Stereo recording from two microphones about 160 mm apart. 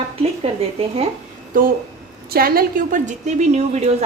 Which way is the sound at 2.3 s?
70° right (ahead or behind).